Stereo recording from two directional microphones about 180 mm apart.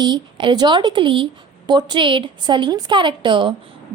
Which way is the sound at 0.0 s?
25° right (ahead or behind).